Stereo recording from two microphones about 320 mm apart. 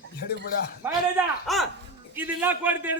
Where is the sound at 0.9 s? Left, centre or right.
Centre.